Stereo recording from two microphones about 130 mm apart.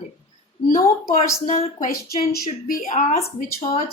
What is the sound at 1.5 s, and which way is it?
Speech, 90° left.